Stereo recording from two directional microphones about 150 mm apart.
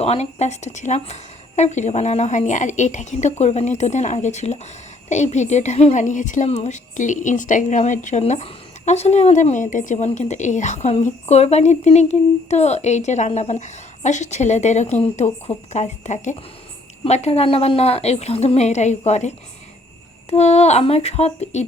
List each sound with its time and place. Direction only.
0.0 s a woman's voice: 45° left (ahead or behind)
20.3 s a woman's voice: 45° left (ahead or behind)